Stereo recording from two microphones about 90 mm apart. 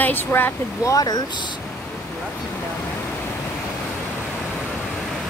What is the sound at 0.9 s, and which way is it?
Speech, 45° left (ahead or behind).